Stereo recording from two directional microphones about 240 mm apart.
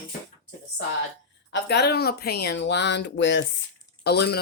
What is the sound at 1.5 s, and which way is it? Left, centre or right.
Speech, left.